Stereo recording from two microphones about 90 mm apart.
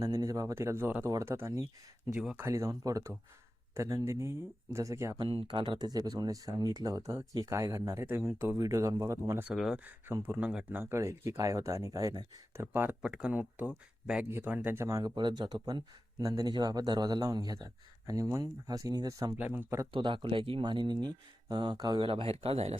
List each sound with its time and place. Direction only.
0.0 s speech: 40° right (ahead or behind)
5.2 s speech: 70° right (ahead or behind); by 9.4 s 35° right (ahead or behind)
9.6 s speech: 5° right (ahead or behind)
10.1 s speech: 40° right (ahead or behind)
10.7 s speech: 25° right (ahead or behind); by 12.6 s 40° right (ahead or behind)
12.7 s speech: 25° right (ahead or behind)
13.0 s speech: 10° right (ahead or behind)
14.8 s speech: 40° right (ahead or behind)
15.1 s speech: 55° right (ahead or behind)
16.2 s speech: 40° right (ahead or behind)
19.4 s speech: 20° right (ahead or behind)
19.9 s speech: 65° right (ahead or behind)
22.0 s speech: 90° right